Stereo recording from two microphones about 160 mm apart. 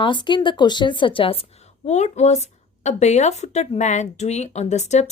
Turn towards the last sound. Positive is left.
turn(degrees=45)  # may be behind; listen again after turning